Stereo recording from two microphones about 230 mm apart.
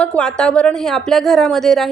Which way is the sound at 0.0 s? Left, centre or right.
Centre.